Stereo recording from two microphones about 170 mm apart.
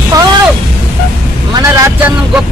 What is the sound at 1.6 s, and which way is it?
Speech, 15° right (ahead or behind).